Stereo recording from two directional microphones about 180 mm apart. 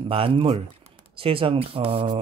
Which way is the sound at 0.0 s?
30° right (ahead or behind).